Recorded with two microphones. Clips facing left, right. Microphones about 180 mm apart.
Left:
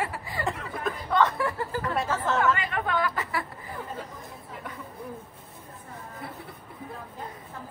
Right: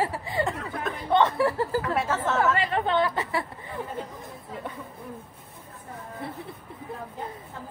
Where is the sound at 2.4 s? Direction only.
30° right (ahead or behind).